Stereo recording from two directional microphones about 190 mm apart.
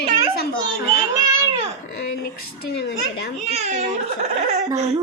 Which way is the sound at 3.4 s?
35° right (ahead or behind).